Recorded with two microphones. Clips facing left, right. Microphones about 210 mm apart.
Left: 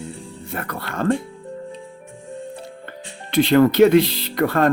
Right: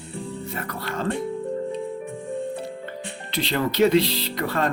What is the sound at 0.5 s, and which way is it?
Speech, 55° left (ahead or behind).